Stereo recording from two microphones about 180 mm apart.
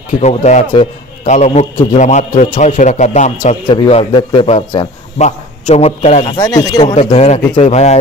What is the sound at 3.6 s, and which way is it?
A man's voice, 30° left (ahead or behind).